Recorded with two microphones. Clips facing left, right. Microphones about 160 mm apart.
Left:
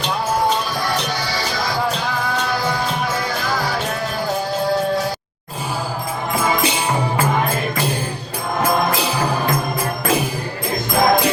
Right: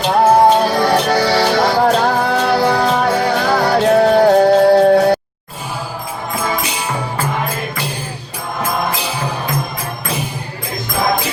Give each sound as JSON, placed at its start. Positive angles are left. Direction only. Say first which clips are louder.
{"t": 0.0, "sound": "music", "louder": "right 9 dB", "side_deg": -65}